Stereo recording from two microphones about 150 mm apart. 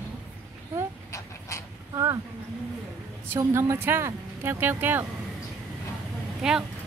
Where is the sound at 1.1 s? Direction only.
20° left (ahead or behind).